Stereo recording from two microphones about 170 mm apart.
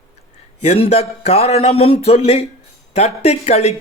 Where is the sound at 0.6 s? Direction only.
40° left (ahead or behind).